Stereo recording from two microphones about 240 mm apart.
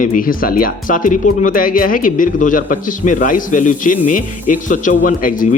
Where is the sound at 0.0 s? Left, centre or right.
Left.